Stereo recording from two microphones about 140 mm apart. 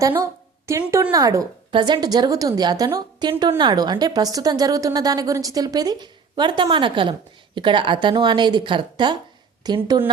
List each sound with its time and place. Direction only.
0.7 s a woman's voice: 20° right (ahead or behind)